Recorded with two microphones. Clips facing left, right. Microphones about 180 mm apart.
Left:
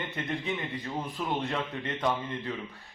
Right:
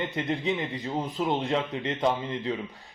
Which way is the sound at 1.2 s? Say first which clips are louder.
Right 6 dB; 25° right (ahead or behind).